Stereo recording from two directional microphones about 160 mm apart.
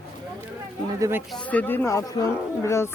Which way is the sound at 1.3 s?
10° left (ahead or behind).